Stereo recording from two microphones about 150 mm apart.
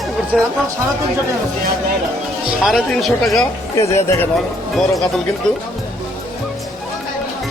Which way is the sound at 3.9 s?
20° left (ahead or behind).